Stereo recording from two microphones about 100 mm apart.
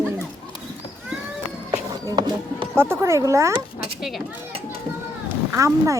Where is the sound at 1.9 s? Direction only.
45° right (ahead or behind).